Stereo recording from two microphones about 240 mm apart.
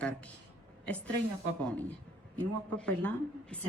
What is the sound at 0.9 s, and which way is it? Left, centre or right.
Speech, centre.